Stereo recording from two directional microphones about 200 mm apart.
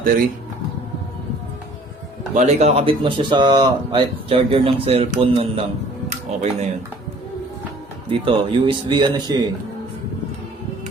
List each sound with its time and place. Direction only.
2.3 s speech: 35° right (ahead or behind)
8.2 s speech: 25° right (ahead or behind)